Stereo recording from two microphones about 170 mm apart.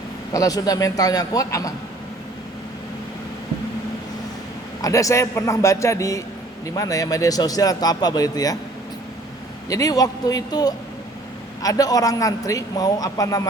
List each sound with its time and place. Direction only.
0.3 s a man's voice: 20° left (ahead or behind)
4.8 s a man's voice: 20° left (ahead or behind)
9.6 s a man's voice: 20° left (ahead or behind)